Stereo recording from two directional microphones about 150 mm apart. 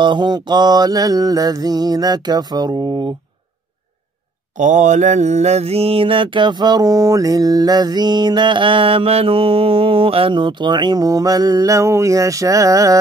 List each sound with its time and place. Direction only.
0.0 s mantra: 30° right (ahead or behind)
4.6 s mantra: 55° right (ahead or behind); by 13.0 s 20° right (ahead or behind)